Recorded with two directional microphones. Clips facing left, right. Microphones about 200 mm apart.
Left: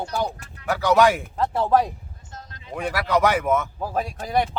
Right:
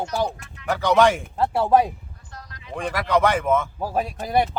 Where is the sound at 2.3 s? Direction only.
25° left (ahead or behind).